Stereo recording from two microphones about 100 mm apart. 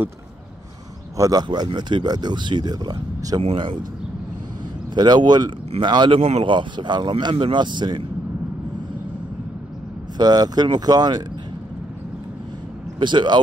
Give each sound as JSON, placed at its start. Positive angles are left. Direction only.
{"t": 1.1, "sound": "speech", "side_deg": -35}
{"t": 4.9, "sound": "speech", "side_deg": -45}
{"t": 10.1, "sound": "speech", "side_deg": -45}
{"t": 13.0, "sound": "speech", "side_deg": -50}